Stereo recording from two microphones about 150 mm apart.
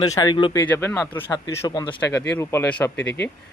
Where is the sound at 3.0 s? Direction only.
90° left.